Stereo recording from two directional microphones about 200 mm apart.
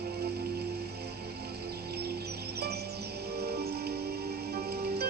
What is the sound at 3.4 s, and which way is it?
Music, 55° right (ahead or behind).